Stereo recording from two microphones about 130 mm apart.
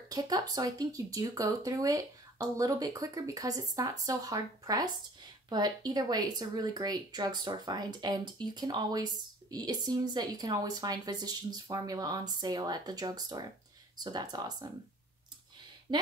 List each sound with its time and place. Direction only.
0.1 s speech: 30° right (ahead or behind)
15.9 s speech: 35° right (ahead or behind)